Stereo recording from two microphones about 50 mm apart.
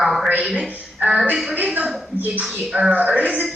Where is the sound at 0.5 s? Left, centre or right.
Centre.